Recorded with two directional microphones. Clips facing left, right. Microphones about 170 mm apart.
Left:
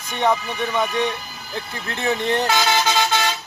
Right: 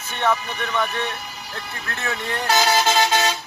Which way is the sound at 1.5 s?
20° left (ahead or behind).